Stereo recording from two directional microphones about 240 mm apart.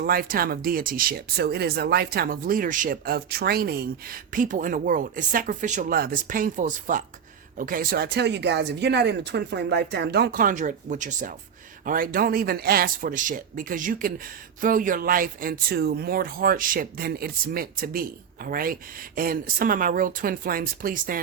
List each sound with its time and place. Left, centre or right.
0.0 s speech: right